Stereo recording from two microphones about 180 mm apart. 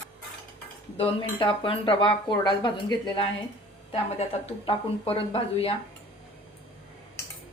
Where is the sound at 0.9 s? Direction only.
30° left (ahead or behind).